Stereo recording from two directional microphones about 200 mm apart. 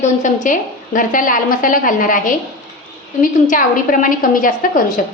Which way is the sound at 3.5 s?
40° left (ahead or behind).